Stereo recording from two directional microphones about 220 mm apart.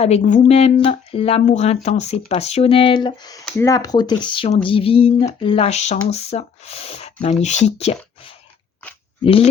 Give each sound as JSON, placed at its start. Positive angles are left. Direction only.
{"t": 0.0, "sound": "speech", "side_deg": 30}
{"t": 9.2, "sound": "speech", "side_deg": 25}